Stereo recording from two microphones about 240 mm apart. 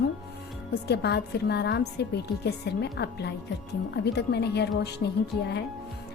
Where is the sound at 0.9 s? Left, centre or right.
Left.